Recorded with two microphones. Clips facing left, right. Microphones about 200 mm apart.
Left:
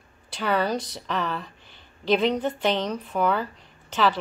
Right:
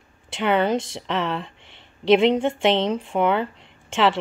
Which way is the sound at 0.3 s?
20° right (ahead or behind).